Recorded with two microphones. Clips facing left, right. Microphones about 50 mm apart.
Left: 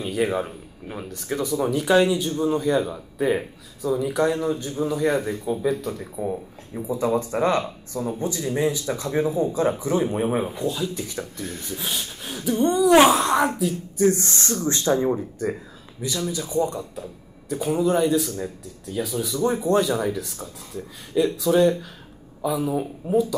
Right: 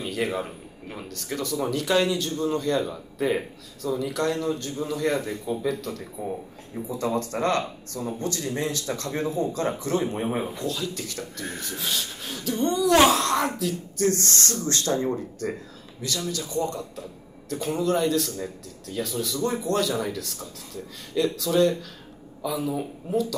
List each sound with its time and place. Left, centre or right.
0.1 s speech: centre